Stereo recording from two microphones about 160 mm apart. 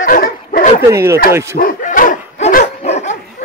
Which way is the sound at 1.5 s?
60° left (ahead or behind).